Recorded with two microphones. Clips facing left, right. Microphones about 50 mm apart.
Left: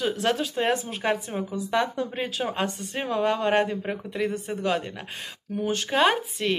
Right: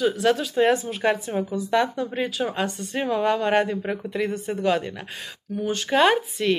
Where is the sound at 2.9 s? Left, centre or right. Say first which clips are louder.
Right 3 dB; centre.